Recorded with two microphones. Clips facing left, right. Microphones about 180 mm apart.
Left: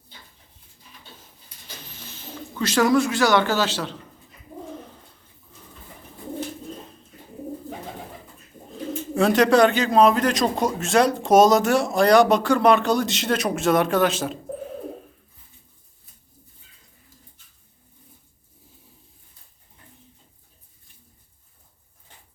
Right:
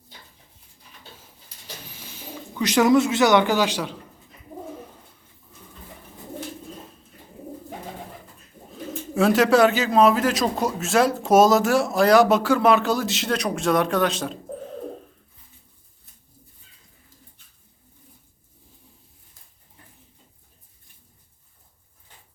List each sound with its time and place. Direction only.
1.9 s speech: 10° right (ahead or behind)
9.1 s a man's voice: 5° right (ahead or behind)